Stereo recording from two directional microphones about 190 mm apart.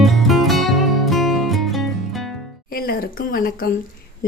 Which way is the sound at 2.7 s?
50° left (ahead or behind).